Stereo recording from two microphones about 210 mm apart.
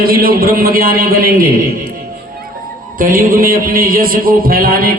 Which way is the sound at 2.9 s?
40° right (ahead or behind).